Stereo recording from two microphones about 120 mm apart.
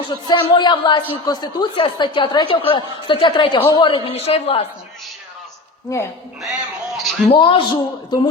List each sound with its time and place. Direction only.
0.1 s a man's voice: 40° left (ahead or behind)
4.1 s a man's voice: 60° left (ahead or behind)
5.9 s a man's voice: 25° left (ahead or behind)
6.9 s a woman's voice: centre (ahead or behind)
7.3 s a man's voice: 45° left (ahead or behind)